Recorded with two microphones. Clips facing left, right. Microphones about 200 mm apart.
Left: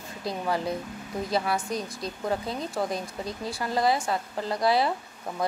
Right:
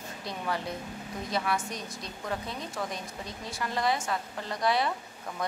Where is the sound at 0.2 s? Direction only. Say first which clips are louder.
Left 6 dB; 35° left (ahead or behind).